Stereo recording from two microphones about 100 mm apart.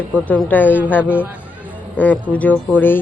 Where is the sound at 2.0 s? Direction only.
15° left (ahead or behind).